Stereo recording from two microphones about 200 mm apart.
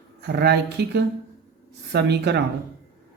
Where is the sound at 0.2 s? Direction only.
55° right (ahead or behind).